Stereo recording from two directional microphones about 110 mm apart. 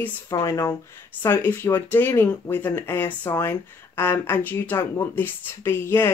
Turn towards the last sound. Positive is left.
turn(degrees=25)  # may be behind; listen again after turning